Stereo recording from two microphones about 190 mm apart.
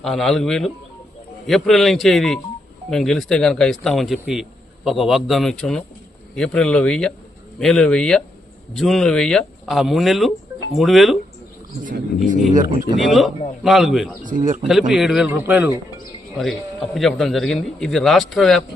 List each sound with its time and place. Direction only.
0.0 s speech: centre (ahead or behind)
11.9 s speech: 45° right (ahead or behind)
13.0 s speech: centre (ahead or behind)
14.2 s speech: 45° right (ahead or behind)
14.6 s speech: centre (ahead or behind)